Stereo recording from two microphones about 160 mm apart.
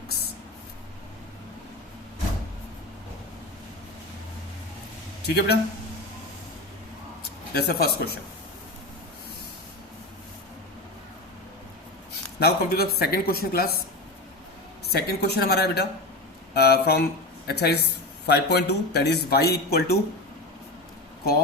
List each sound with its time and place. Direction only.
5.2 s a man's voice: 90° left
7.5 s speech: 80° left
12.4 s speech: 80° left
14.9 s a woman's voice: 85° left